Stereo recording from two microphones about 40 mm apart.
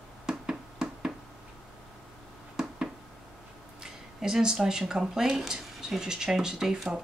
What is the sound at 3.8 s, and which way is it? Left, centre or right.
Speech, centre.